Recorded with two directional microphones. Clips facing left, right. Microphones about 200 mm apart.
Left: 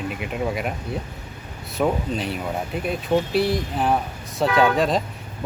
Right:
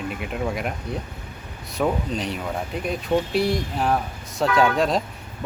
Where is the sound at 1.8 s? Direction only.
5° left (ahead or behind).